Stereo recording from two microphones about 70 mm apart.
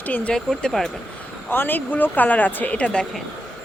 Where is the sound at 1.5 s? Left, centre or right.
Left.